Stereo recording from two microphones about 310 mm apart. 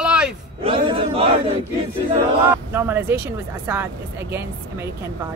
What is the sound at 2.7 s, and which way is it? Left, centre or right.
Speech, centre.